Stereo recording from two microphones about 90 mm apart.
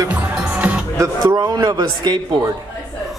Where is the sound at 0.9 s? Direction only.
45° right (ahead or behind).